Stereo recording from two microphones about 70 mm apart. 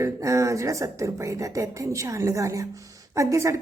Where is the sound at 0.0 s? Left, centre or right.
Right.